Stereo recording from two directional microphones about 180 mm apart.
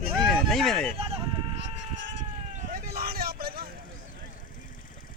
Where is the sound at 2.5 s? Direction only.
45° right (ahead or behind).